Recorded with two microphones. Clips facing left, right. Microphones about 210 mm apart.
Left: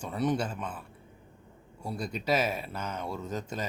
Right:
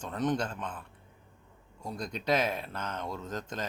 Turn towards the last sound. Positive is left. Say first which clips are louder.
# left 2 dB
turn(degrees=10)  # may be behind; listen again after turning